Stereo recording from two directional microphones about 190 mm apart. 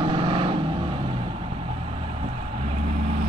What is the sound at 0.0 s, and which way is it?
Vehicle, 25° right (ahead or behind).